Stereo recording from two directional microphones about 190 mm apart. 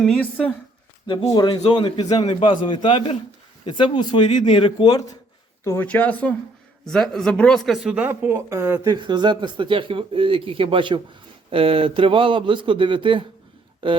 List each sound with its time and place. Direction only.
0.0 s speech: 5° left (ahead or behind)
1.0 s a man's voice: 25° left (ahead or behind); by 14.0 s 25° right (ahead or behind)